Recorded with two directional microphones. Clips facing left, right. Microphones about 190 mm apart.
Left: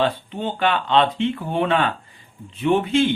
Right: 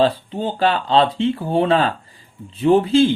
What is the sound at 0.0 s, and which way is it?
Speech, 35° right (ahead or behind).